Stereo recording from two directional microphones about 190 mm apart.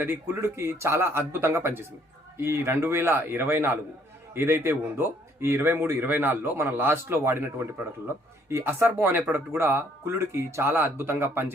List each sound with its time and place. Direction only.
0.0 s speech: 10° right (ahead or behind)